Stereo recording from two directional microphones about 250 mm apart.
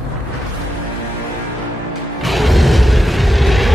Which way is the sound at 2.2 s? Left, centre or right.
Centre.